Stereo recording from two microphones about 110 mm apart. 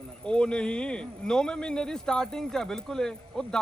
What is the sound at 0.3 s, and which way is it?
Speech, 10° left (ahead or behind).